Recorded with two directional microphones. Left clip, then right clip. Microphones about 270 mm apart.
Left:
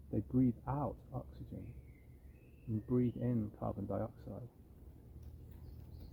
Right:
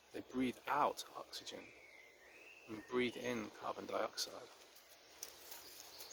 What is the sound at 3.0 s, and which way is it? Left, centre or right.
Speech, centre.